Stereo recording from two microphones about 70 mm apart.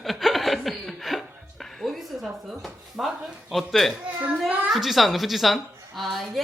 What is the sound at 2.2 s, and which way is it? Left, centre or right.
A woman's voice, centre.